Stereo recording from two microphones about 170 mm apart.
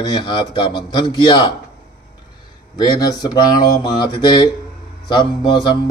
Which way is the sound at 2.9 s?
25° left (ahead or behind).